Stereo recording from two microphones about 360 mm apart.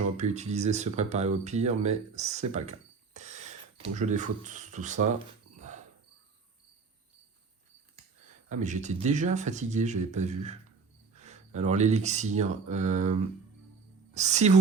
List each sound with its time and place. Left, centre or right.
0.2 s speech: centre
5.5 s cricket: centre
8.4 s speech: centre